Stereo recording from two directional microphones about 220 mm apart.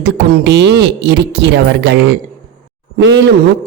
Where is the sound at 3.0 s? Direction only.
55° right (ahead or behind).